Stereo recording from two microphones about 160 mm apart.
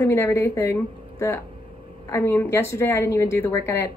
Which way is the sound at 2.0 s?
15° left (ahead or behind).